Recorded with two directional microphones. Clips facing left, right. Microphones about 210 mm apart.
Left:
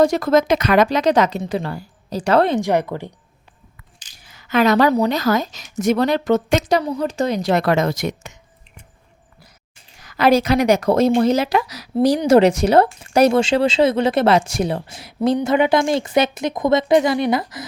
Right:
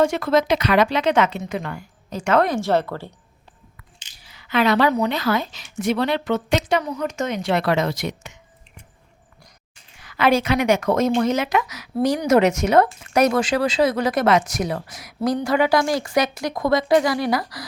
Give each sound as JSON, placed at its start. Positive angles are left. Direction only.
{"t": 0.0, "sound": "a woman's voice", "side_deg": 40}
{"t": 2.6, "sound": "speech", "side_deg": 15}
{"t": 4.2, "sound": "a woman's voice", "side_deg": 45}
{"t": 10.0, "sound": "a woman's voice", "side_deg": 40}